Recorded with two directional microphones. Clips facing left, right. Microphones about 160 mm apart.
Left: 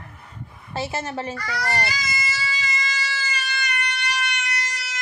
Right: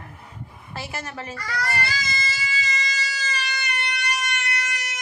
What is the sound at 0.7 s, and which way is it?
Speech, 25° left (ahead or behind).